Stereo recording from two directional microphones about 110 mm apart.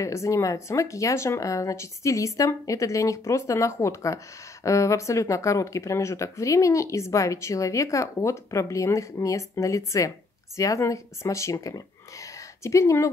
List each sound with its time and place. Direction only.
0.0 s speech: 30° left (ahead or behind)